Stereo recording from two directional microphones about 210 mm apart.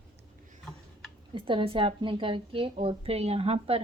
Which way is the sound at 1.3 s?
25° right (ahead or behind).